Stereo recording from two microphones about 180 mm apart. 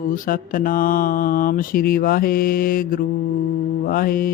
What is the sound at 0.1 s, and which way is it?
Mantra, 50° left (ahead or behind).